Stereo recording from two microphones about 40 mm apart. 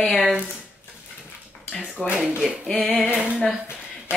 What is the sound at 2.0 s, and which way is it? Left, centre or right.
Speech, left.